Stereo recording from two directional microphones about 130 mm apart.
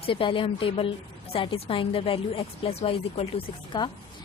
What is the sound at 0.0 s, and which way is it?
A woman's voice, 40° left (ahead or behind).